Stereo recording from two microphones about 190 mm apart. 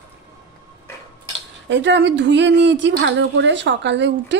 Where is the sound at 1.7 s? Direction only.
70° right (ahead or behind).